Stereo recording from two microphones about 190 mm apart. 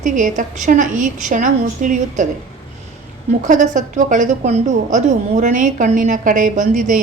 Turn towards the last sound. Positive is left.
turn(degrees=-40)  # may be behind; listen again after turning